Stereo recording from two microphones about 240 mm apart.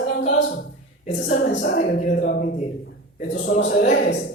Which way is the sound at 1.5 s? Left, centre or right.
Left.